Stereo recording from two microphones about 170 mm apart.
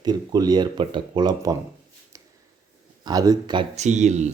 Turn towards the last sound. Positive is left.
turn(degrees=-40)  # may be behind; listen again after turning